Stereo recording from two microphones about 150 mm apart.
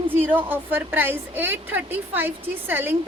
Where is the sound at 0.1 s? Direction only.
15° right (ahead or behind).